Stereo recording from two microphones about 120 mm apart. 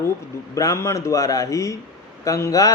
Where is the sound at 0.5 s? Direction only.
25° left (ahead or behind).